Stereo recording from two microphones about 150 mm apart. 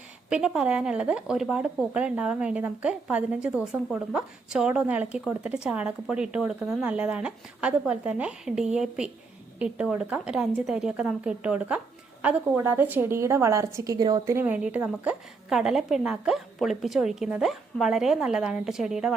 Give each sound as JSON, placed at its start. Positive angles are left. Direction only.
{"t": 0.3, "sound": "a woman's voice", "side_deg": -5}